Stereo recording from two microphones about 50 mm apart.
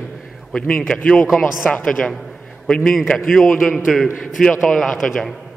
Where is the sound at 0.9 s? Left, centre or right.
Centre.